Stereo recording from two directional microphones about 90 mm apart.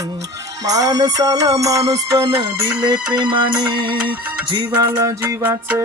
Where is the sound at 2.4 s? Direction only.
55° right (ahead or behind).